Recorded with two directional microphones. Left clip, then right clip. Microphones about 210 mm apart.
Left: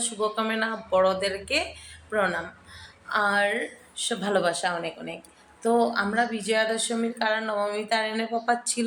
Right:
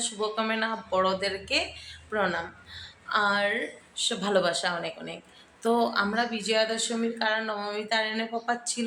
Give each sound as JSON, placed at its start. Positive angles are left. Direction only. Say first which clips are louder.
{"t": 0.0, "sound": "speech", "louder": "left 2 dB", "side_deg": 0}